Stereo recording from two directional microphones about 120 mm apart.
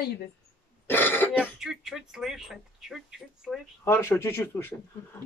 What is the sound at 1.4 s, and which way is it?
Speech, 5° right (ahead or behind).